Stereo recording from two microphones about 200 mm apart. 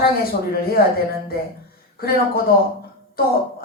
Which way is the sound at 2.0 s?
50° left (ahead or behind).